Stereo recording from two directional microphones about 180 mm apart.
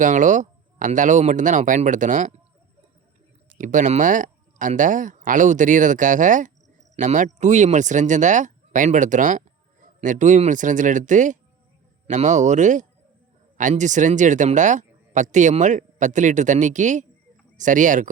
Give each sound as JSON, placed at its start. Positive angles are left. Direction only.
{"t": 0.0, "sound": "speech", "side_deg": -45}
{"t": 3.6, "sound": "speech", "side_deg": -45}